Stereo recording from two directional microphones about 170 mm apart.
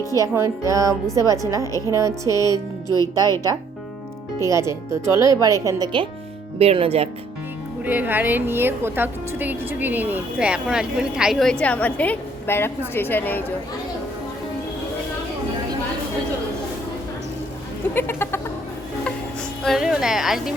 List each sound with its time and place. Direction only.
0.2 s a woman's voice: 20° right (ahead or behind)
2.5 s speech: 20° left (ahead or behind)
4.4 s speech: 15° right (ahead or behind); by 7.1 s 35° right (ahead or behind)
7.9 s a woman's voice: 10° right (ahead or behind); by 13.4 s 10° left (ahead or behind)
17.9 s cat: 15° left (ahead or behind)
19.6 s a woman's voice: centre (ahead or behind)